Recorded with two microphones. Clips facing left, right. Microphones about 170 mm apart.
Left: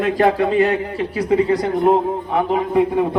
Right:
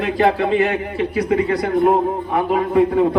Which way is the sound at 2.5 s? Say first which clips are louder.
Right 2 dB; 20° left (ahead or behind).